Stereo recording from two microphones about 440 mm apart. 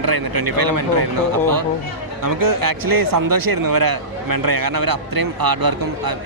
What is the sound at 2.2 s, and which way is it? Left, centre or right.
Speech, right.